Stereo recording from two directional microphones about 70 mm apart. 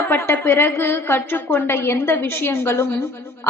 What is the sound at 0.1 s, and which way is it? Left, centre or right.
A woman's voice, left.